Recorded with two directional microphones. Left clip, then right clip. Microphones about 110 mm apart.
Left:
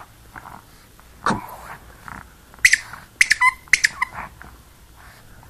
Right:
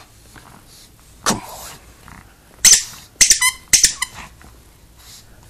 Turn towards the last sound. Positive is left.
turn(degrees=-55)  # may be behind; listen again after turning